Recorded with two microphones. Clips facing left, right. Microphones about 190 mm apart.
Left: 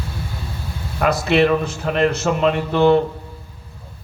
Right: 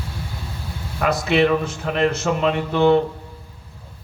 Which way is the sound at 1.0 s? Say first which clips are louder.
Left 2 dB; 55° left (ahead or behind).